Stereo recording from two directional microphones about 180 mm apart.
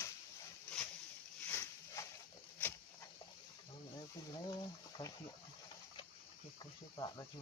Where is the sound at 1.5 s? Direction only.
15° left (ahead or behind).